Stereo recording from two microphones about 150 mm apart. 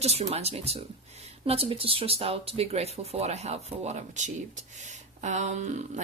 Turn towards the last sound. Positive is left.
turn(degrees=-50)  # may be behind; listen again after turning